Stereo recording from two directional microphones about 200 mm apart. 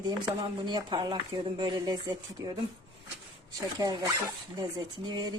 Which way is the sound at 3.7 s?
20° right (ahead or behind).